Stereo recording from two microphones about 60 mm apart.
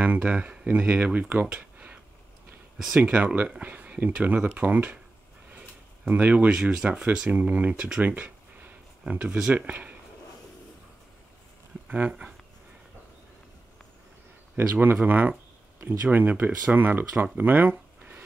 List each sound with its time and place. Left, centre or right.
0.0 s speech: right
3.0 s speech: right
6.0 s speech: right
7.2 s speech: right
8.0 s a sound: right
9.7 s speech: right
11.9 s speech: right
14.8 s speech: right